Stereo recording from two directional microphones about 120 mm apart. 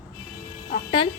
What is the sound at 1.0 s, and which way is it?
Speech, 45° left (ahead or behind).